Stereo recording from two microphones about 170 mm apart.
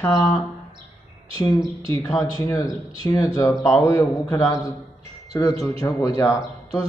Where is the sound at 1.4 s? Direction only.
20° left (ahead or behind).